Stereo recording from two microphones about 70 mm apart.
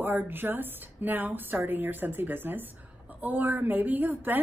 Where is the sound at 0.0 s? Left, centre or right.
Right.